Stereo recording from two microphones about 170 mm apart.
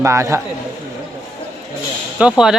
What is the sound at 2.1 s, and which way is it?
Speech, 5° right (ahead or behind).